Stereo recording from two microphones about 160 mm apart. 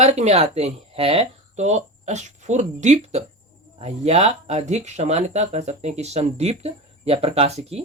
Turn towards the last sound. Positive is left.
turn(degrees=-40)  # may be behind; listen again after turning